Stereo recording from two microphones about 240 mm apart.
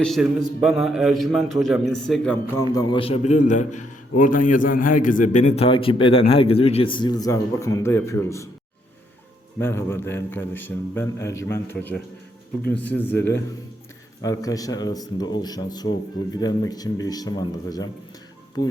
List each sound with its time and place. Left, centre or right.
0.0 s a man's voice: centre
2.7 s a man's voice: left
9.6 s speech: centre